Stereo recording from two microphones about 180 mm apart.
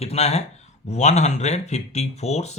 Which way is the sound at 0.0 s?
35° left (ahead or behind).